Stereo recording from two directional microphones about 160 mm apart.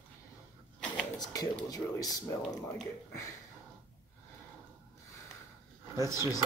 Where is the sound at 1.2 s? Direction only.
25° left (ahead or behind).